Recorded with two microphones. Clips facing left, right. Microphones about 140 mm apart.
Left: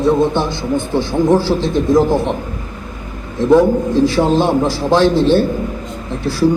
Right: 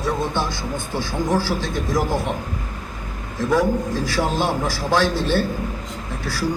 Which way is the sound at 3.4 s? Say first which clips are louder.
Left 8 dB; 20° left (ahead or behind).